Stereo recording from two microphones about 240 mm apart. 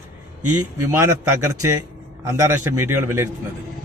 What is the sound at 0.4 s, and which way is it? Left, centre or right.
Speech, right.